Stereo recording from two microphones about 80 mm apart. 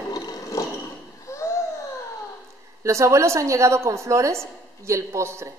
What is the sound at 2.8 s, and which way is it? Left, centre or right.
A woman's voice, right.